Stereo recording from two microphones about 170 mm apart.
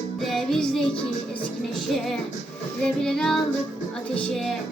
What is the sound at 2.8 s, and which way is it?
Music, 5° left (ahead or behind).